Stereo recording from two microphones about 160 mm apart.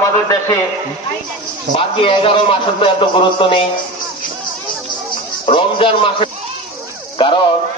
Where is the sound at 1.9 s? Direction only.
35° left (ahead or behind).